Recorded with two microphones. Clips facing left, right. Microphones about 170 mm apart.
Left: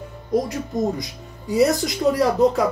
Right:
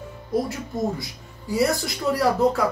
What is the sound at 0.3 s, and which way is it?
Speech, 20° left (ahead or behind).